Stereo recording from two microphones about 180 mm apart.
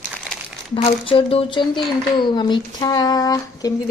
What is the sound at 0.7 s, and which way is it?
A child's voice, 30° left (ahead or behind).